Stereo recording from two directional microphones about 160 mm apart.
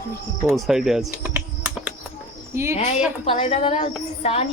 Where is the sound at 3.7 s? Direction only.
40° left (ahead or behind).